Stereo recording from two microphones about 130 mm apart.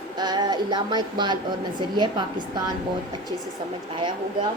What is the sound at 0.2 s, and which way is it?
Music, 35° right (ahead or behind).